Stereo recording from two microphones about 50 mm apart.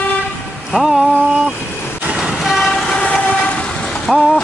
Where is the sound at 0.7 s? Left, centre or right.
Centre.